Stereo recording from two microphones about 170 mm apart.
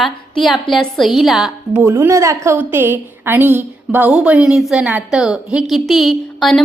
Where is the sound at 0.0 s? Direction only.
Centre (ahead or behind).